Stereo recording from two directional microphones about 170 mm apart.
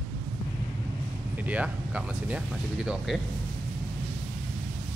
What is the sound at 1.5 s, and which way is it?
Speech, 5° right (ahead or behind).